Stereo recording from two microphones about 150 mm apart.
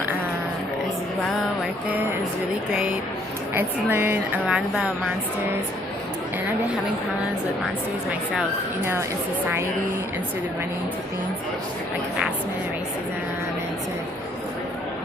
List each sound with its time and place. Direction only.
2.7 s a woman's voice: 5° right (ahead or behind)
8.8 s a woman's voice: 15° right (ahead or behind)